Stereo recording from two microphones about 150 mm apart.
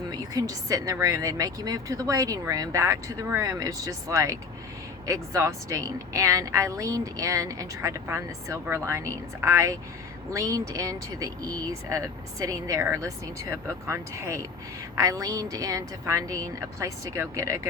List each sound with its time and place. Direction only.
0.1 s speech: 25° right (ahead or behind)